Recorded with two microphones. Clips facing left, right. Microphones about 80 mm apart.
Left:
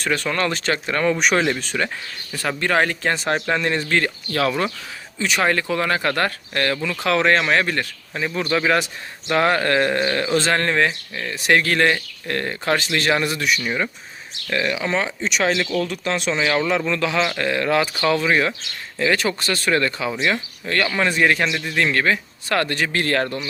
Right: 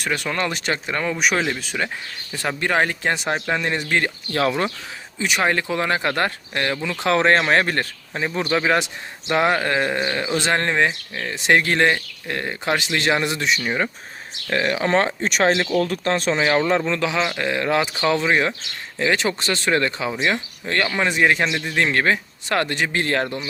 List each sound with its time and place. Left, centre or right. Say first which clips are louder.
0.0 s speech: left 2 dB; centre
2.3 s speech: left 1 dB; centre
3.6 s speech: left 1 dB; centre; by 8.2 s right
8.2 s speech: even; right
14.5 s speech: right 2 dB; right
14.9 s speech: right 3 dB; right
20.1 s speech: even; centre